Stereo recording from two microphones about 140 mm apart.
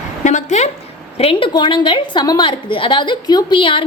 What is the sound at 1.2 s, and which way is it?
A woman's voice, 40° left (ahead or behind).